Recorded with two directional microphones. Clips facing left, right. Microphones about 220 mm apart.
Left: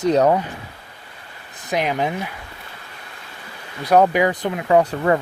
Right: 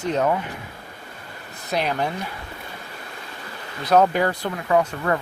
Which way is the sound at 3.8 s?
15° left (ahead or behind).